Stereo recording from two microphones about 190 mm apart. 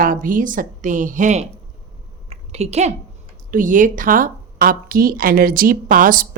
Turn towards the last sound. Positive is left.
turn(degrees=-45)  # may be behind; listen again after turning